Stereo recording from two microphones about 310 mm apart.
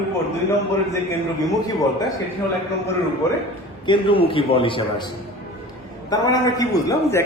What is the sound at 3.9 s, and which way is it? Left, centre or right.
A man's voice, centre.